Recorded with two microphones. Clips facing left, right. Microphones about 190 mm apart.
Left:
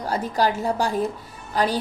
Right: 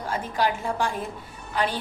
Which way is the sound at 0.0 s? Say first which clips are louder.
Left 3 dB; 40° left (ahead or behind).